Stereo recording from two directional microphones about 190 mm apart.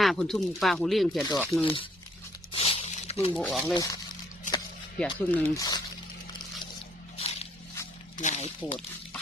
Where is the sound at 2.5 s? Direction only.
30° left (ahead or behind).